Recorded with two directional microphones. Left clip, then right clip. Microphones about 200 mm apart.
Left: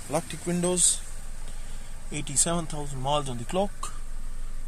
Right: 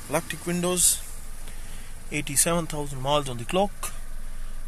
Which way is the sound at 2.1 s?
15° right (ahead or behind).